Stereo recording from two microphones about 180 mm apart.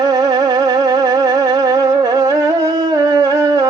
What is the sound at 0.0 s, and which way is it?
Music, 20° right (ahead or behind).